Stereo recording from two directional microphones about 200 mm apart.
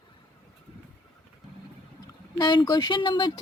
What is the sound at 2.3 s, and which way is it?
Speech, 20° left (ahead or behind).